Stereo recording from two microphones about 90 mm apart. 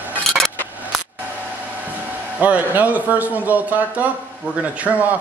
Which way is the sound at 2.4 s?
15° right (ahead or behind).